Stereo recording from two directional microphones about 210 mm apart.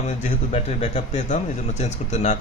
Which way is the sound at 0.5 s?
30° left (ahead or behind).